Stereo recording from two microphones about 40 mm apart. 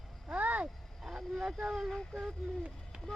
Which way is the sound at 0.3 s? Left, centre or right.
Right.